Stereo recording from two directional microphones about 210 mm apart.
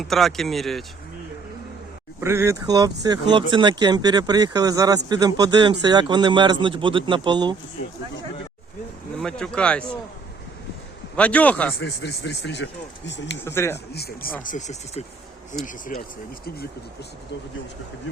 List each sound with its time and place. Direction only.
0.0 s speech: centre (ahead or behind)
2.2 s speech: 10° right (ahead or behind)
9.1 s speech: 5° left (ahead or behind)
11.2 s a man's voice: 5° left (ahead or behind)
11.8 s speech: 55° left (ahead or behind)
13.4 s a man's voice: 10° left (ahead or behind)
13.9 s speech: 50° left (ahead or behind)
14.4 s speech: 35° left (ahead or behind)